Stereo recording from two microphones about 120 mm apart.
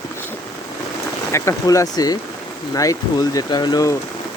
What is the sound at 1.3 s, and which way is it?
Speech, 25° left (ahead or behind).